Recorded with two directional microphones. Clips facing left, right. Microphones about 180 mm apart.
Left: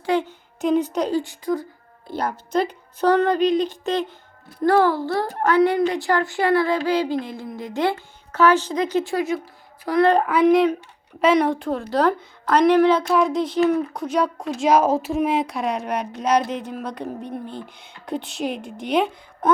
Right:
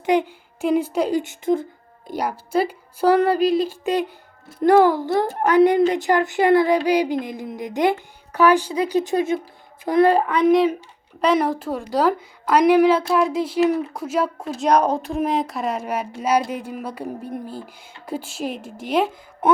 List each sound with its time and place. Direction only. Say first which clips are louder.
0.0 s speech: right 3 dB; 15° right (ahead or behind)
1.2 s a child's voice: right 4 dB; 25° right (ahead or behind)
2.0 s a child's voice: right 1 dB; 10° right (ahead or behind)
10.2 s a woman's voice: even; centre (ahead or behind)